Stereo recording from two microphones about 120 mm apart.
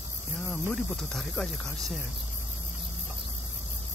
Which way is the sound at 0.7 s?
Centre (ahead or behind).